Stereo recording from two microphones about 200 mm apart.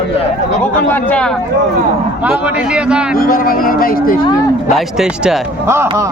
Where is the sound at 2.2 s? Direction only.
5° right (ahead or behind).